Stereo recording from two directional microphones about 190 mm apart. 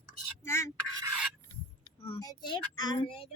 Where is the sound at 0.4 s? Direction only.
15° left (ahead or behind).